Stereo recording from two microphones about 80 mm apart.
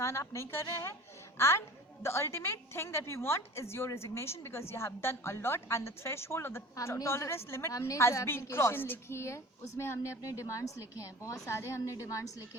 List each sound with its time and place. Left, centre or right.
0.0 s a woman's voice: left